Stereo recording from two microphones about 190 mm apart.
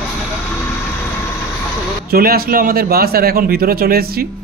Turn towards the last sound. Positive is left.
turn(degrees=-55)  # may be behind; listen again after turning